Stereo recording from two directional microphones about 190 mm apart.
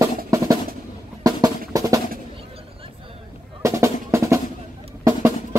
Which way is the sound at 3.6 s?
15° right (ahead or behind).